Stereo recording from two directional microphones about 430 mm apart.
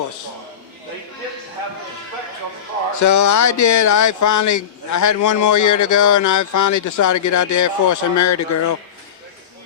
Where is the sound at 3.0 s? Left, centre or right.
Left.